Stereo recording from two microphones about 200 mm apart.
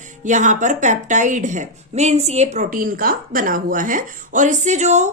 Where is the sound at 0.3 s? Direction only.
40° right (ahead or behind).